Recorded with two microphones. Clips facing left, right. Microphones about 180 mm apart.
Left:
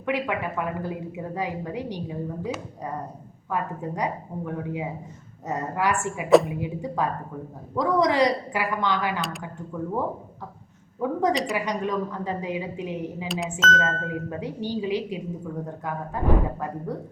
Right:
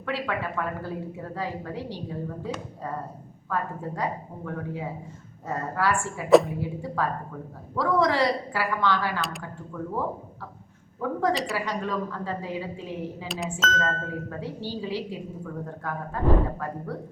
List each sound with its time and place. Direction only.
0.0 s a woman's voice: 15° left (ahead or behind)
3.5 s a woman's voice: 15° left (ahead or behind)
6.2 s speech: centre (ahead or behind)
6.6 s a woman's voice: 15° left (ahead or behind)
11.0 s a woman's voice: 15° left (ahead or behind)
13.2 s speech: centre (ahead or behind)
13.8 s a woman's voice: 15° left (ahead or behind)